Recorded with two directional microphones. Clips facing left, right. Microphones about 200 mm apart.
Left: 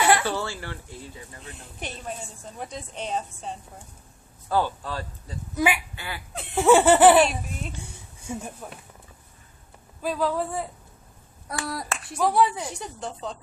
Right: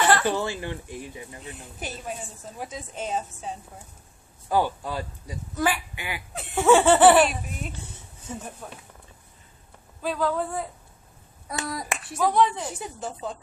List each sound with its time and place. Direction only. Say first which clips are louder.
0.0 s a sound: even; 10° left (ahead or behind)
0.3 s speech: right 3 dB; 15° right (ahead or behind)
1.5 s a woman's voice: even; 5° right (ahead or behind)
5.5 s laughter: left 1 dB; 10° left (ahead or behind)
5.9 s duck: right 2 dB; 15° right (ahead or behind)
6.3 s laughter: left 1 dB; 5° left (ahead or behind)
7.2 s a woman's voice: even; centre (ahead or behind)
8.2 s a sound: left 3 dB; 10° left (ahead or behind)
10.0 s laughter: even; 10° left (ahead or behind)
11.6 s a woman's voice: even; centre (ahead or behind)
12.7 s a woman's voice: right 1 dB; 5° right (ahead or behind)